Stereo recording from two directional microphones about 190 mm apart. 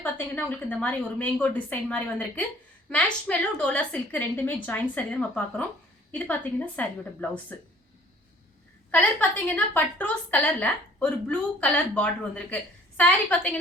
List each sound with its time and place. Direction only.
0.0 s a woman's voice: 10° left (ahead or behind)
8.9 s a woman's voice: 10° left (ahead or behind)